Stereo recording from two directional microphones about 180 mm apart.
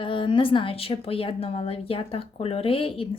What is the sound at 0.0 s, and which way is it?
A woman's voice, 30° left (ahead or behind).